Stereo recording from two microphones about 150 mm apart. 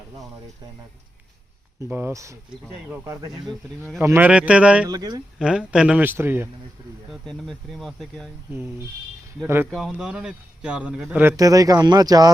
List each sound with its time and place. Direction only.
1.8 s a man's voice: 15° right (ahead or behind)
4.9 s speech: 25° right (ahead or behind)
5.4 s a man's voice: 5° right (ahead or behind)
7.1 s speech: centre (ahead or behind)
9.6 s a man's voice: centre (ahead or behind); by 12.3 s 25° right (ahead or behind)